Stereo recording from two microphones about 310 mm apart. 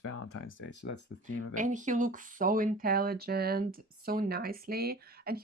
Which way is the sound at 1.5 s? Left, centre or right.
Right.